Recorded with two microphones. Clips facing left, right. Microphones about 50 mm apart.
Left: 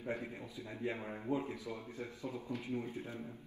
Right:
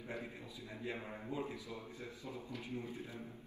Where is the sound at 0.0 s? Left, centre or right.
Left.